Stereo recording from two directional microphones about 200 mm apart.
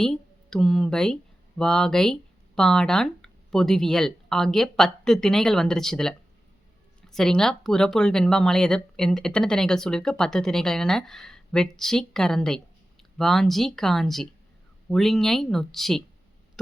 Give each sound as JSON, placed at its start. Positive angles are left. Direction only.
{"t": 0.0, "sound": "speech", "side_deg": 0}